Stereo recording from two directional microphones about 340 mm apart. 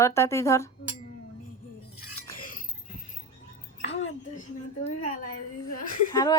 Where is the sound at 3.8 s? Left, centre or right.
Left.